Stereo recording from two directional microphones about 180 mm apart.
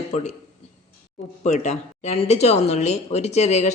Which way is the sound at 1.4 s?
40° left (ahead or behind).